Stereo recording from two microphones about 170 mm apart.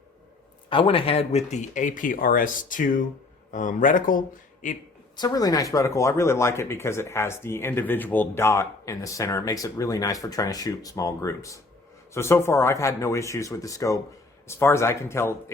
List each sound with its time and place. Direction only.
0.7 s speech: 30° left (ahead or behind); by 4.2 s 50° left (ahead or behind)
5.1 s speech: 25° left (ahead or behind)